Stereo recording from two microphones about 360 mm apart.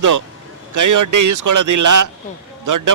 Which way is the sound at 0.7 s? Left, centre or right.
Right.